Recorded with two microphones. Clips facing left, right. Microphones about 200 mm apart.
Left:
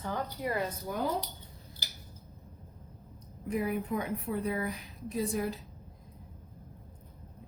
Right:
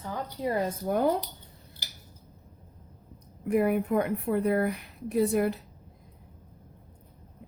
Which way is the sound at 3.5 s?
65° right (ahead or behind).